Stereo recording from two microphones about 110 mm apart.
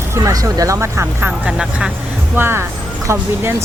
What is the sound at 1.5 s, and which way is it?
Speech, 5° right (ahead or behind).